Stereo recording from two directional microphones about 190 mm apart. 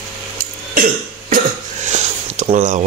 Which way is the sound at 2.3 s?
40° right (ahead or behind).